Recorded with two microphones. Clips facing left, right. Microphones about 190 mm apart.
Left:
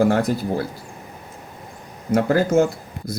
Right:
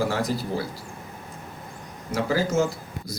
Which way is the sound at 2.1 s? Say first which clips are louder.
Left 7 dB; 55° left (ahead or behind).